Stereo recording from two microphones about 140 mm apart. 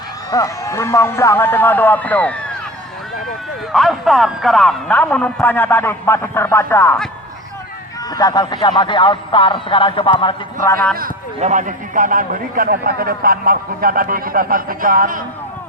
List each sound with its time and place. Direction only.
0.3 s a man's voice: 25° left (ahead or behind)
3.7 s a man's voice: centre (ahead or behind); by 6.9 s 20° left (ahead or behind)
8.1 s speech: 30° left (ahead or behind)
10.6 s a man's voice: 20° left (ahead or behind)
11.3 s a man's voice: 60° right (ahead or behind); by 15.2 s 85° right